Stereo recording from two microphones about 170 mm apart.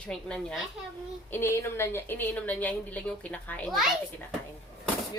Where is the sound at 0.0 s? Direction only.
5° left (ahead or behind).